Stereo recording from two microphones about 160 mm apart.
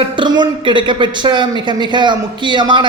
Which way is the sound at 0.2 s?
30° right (ahead or behind).